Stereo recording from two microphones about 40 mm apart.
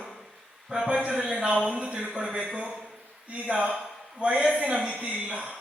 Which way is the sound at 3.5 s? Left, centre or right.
Right.